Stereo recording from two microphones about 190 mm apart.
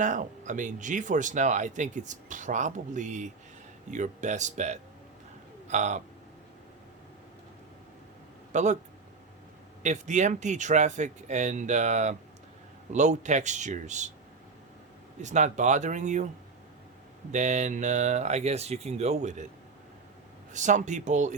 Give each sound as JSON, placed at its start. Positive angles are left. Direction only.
{"t": 0.0, "sound": "speech", "side_deg": -40}
{"t": 8.5, "sound": "speech", "side_deg": -40}
{"t": 9.8, "sound": "speech", "side_deg": -40}
{"t": 15.2, "sound": "speech", "side_deg": -40}
{"t": 17.3, "sound": "speech", "side_deg": -40}
{"t": 20.5, "sound": "speech", "side_deg": -40}